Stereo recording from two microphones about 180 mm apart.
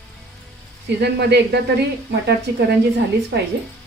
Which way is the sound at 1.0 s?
65° right (ahead or behind).